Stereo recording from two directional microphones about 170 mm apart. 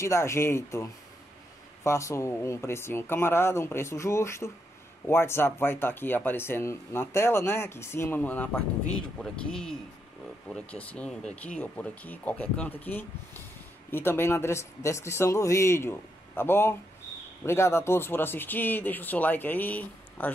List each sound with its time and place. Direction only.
0.0 s speech: 15° left (ahead or behind)